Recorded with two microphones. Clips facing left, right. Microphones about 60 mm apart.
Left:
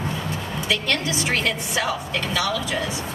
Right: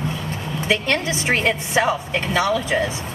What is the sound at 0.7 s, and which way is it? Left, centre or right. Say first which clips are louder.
A woman's voice: right 4 dB; right.